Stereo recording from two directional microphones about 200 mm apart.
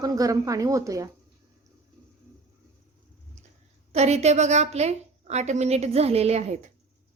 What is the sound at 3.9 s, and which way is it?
A woman's voice, 35° right (ahead or behind).